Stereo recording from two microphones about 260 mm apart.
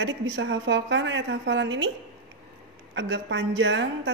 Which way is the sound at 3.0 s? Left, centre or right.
Right.